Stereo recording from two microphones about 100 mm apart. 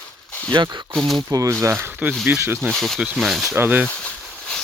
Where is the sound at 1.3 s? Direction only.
35° right (ahead or behind).